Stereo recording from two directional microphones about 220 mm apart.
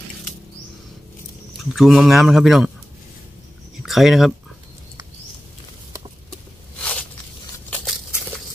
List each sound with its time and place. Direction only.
1.7 s speech: centre (ahead or behind)
3.8 s speech: centre (ahead or behind)
7.7 s a sound: centre (ahead or behind)